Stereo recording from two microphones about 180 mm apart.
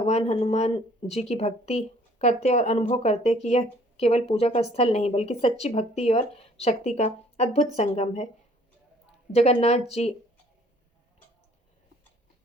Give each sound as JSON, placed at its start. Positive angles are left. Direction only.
{"t": 0.0, "sound": "speech", "side_deg": 35}
{"t": 9.3, "sound": "speech", "side_deg": 35}